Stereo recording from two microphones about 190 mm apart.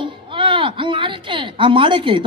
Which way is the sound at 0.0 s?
25° right (ahead or behind).